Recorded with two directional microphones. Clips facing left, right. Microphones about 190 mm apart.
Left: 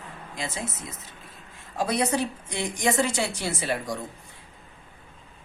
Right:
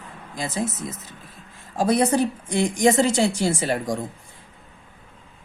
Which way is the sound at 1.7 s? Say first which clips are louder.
Right 6 dB; 45° right (ahead or behind).